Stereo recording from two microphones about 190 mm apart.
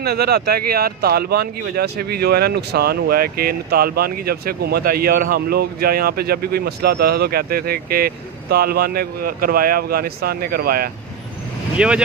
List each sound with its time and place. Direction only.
0.0 s speech: 55° right (ahead or behind)
11.8 s speech: 5° right (ahead or behind)